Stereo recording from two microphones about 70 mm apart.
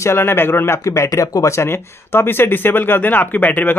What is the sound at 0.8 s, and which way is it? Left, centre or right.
A man's voice, left.